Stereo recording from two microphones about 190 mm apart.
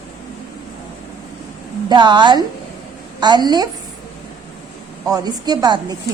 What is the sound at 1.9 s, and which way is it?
A woman's voice, 25° right (ahead or behind).